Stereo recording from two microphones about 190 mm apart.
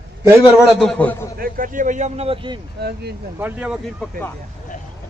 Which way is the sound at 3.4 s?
10° right (ahead or behind).